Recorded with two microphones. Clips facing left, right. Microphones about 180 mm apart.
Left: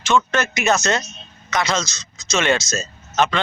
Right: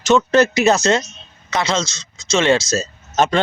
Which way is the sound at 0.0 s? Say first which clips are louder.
Right 6 dB; 35° right (ahead or behind).